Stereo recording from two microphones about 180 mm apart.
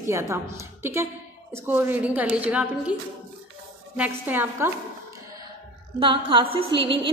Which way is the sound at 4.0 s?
10° right (ahead or behind).